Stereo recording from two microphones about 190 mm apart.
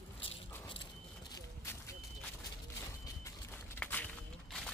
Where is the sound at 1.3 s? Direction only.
15° left (ahead or behind).